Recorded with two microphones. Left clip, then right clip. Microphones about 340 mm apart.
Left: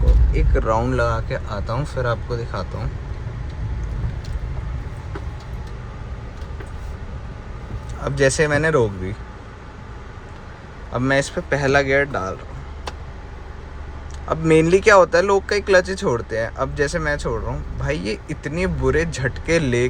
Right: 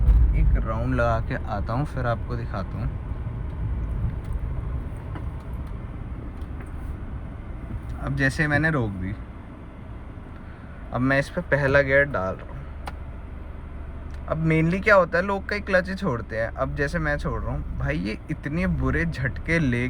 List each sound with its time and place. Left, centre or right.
0.7 s speech: centre
8.0 s speech: centre
10.9 s speech: centre
14.3 s speech: centre